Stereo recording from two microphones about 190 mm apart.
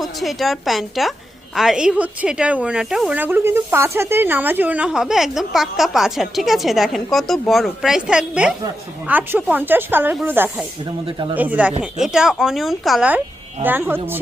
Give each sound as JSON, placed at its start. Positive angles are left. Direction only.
{"t": 0.0, "sound": "speech", "side_deg": 0}
{"t": 11.0, "sound": "speech", "side_deg": -25}
{"t": 11.3, "sound": "speech", "side_deg": -10}